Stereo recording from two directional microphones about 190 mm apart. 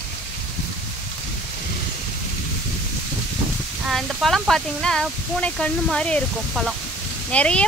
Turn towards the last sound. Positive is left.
turn(degrees=5)  # may be behind; listen again after turning